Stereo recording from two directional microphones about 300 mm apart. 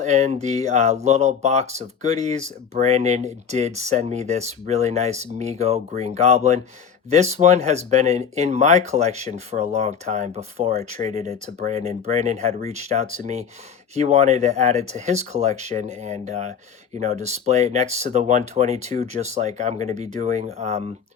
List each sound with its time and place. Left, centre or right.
0.0 s speech: right